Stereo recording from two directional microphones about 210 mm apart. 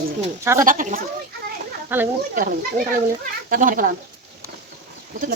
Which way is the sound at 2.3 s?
40° right (ahead or behind).